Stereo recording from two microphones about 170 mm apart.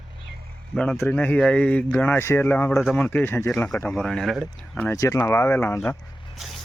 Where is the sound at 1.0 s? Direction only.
10° left (ahead or behind).